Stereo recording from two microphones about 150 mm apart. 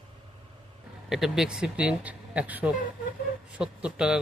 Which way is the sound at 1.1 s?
Centre (ahead or behind).